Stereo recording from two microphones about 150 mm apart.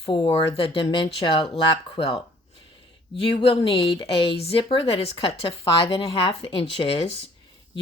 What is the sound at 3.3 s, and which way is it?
A woman's voice, 35° left (ahead or behind).